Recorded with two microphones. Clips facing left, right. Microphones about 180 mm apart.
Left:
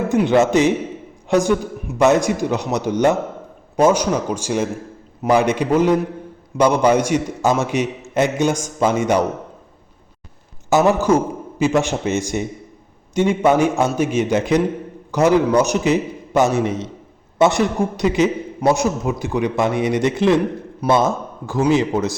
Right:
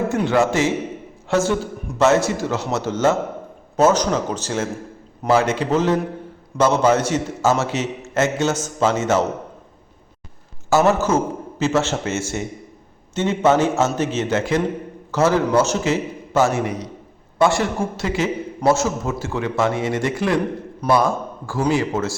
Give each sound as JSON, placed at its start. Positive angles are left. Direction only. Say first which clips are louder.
{"t": 0.1, "sound": "a man's voice", "louder": "left 7 dB", "side_deg": 15}
{"t": 10.7, "sound": "a man's voice", "louder": "left 2 dB", "side_deg": 15}